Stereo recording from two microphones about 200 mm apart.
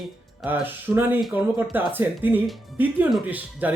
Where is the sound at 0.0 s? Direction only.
10° right (ahead or behind).